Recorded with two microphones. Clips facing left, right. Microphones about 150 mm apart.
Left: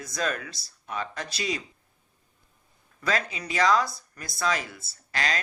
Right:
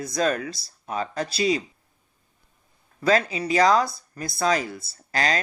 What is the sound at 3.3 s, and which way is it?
Speech, 30° right (ahead or behind).